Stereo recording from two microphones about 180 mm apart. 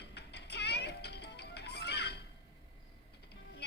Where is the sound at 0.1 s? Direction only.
70° left (ahead or behind).